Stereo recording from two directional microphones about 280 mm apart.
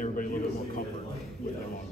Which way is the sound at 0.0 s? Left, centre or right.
Left.